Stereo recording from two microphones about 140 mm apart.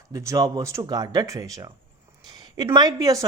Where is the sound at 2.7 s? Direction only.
25° right (ahead or behind).